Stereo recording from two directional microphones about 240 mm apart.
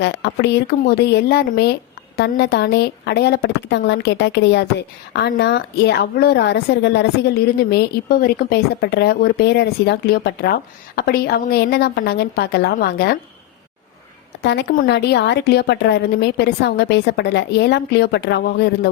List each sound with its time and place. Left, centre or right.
0.0 s a woman's voice: left
14.4 s speech: left